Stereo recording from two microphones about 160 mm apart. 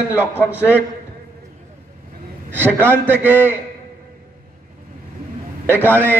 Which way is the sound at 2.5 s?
15° right (ahead or behind).